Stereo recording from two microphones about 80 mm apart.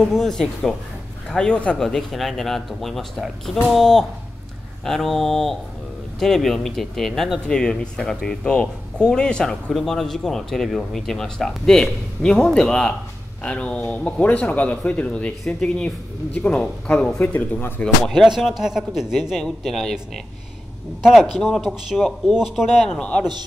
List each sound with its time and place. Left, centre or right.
0.0 s speech: centre
1.8 s speech: centre
17.2 s speech: left
17.8 s speech: centre
18.2 s speech: centre
21.0 s speech: centre
22.9 s speech: centre